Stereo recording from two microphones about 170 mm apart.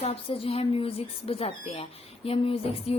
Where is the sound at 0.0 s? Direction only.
35° left (ahead or behind).